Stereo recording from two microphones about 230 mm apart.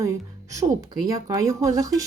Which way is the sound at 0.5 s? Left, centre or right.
Centre.